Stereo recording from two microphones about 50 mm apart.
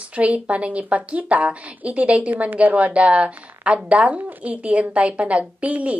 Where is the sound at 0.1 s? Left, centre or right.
Right.